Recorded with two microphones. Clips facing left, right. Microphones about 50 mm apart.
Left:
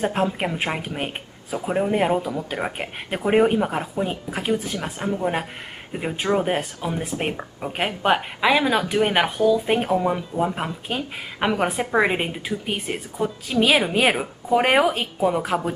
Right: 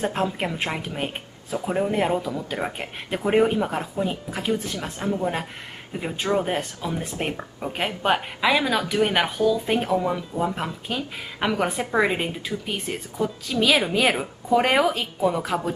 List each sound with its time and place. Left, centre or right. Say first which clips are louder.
0.0 s a woman's voice: left 2 dB; centre